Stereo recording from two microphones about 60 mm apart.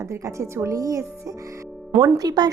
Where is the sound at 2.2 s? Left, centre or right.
Right.